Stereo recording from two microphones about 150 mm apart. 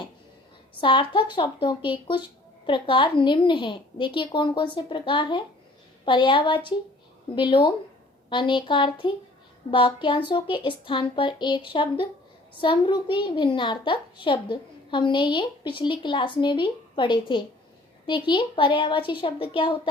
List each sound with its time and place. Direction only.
0.7 s a woman's voice: 35° left (ahead or behind)